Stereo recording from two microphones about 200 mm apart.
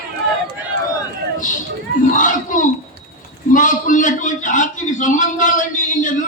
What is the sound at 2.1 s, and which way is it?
A man's voice, 40° left (ahead or behind).